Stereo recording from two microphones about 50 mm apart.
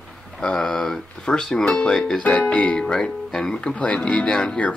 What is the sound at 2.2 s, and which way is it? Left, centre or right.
Speech, left.